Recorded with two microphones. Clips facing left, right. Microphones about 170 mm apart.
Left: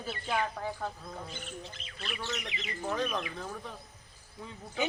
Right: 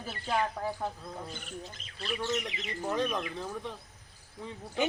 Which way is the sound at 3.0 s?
Centre (ahead or behind).